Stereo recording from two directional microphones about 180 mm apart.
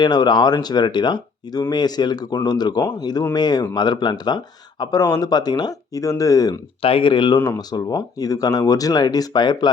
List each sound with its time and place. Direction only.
0.0 s speech: 25° left (ahead or behind)
7.3 s speech: 10° left (ahead or behind)
7.7 s speech: 20° left (ahead or behind)